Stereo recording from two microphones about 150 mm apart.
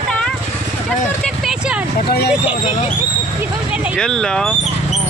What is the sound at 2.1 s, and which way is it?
Speech, 90° left.